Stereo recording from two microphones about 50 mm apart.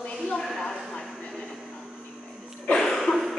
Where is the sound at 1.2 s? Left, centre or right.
Left.